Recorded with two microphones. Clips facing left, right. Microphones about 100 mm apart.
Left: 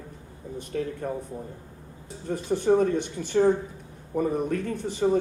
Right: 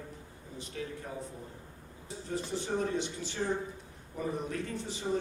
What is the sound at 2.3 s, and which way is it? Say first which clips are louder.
A man's voice: left 12 dB; 55° left (ahead or behind).